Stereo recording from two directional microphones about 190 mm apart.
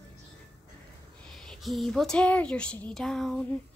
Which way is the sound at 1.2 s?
5° left (ahead or behind).